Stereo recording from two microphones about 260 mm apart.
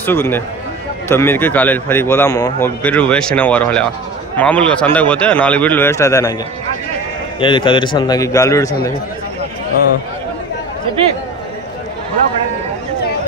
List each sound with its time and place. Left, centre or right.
0.0 s a man's voice: centre
7.3 s a man's voice: centre